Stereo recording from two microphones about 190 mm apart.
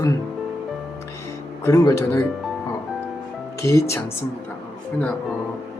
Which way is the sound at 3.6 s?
15° left (ahead or behind).